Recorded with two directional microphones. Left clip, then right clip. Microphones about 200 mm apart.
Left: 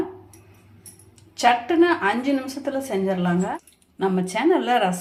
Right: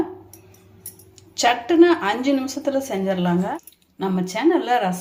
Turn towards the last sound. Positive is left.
turn(degrees=10)  # may be behind; listen again after turning